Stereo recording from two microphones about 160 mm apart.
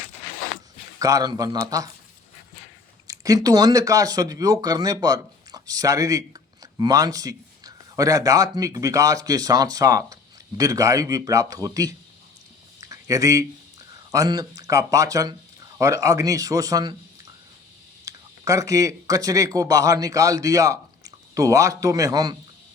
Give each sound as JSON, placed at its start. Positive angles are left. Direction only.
{"t": 0.9, "sound": "a man's voice", "side_deg": -20}
{"t": 3.1, "sound": "a man's voice", "side_deg": -20}
{"t": 12.8, "sound": "a sound", "side_deg": -20}
{"t": 14.1, "sound": "a man's voice", "side_deg": -20}
{"t": 18.0, "sound": "speech", "side_deg": -20}